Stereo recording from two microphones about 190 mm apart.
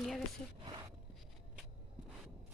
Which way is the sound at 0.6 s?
20° right (ahead or behind).